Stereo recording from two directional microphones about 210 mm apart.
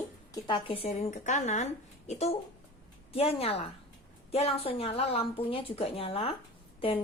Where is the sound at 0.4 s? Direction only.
25° left (ahead or behind).